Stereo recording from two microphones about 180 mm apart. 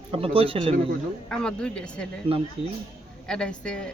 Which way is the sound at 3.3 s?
5° left (ahead or behind).